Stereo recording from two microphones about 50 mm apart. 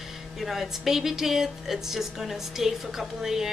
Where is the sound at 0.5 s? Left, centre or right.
Centre.